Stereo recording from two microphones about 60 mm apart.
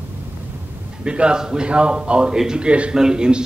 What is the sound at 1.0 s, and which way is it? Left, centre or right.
A man's voice, centre.